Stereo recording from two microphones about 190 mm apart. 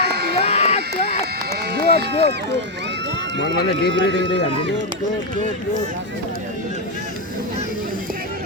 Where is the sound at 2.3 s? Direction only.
65° right (ahead or behind).